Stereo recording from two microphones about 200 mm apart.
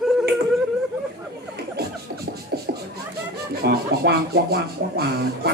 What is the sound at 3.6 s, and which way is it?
Music, 50° right (ahead or behind).